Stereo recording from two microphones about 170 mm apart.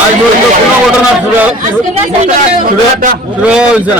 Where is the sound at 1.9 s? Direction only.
35° right (ahead or behind).